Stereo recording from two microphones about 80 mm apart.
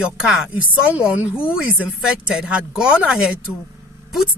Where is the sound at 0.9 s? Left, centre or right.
Centre.